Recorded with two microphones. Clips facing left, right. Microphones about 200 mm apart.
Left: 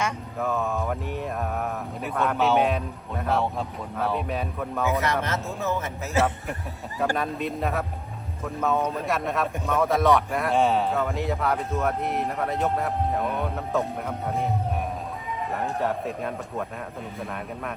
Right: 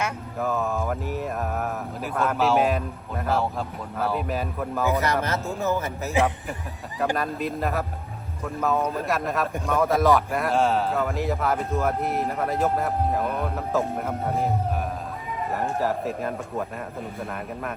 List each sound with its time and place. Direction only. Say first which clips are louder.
0.0 s mantra: even; centre (ahead or behind)
3.9 s a man's voice: right 1 dB; centre (ahead or behind)
6.2 s a man's voice: right 1 dB; 15° right (ahead or behind)
7.2 s a man's voice: right 1 dB; centre (ahead or behind)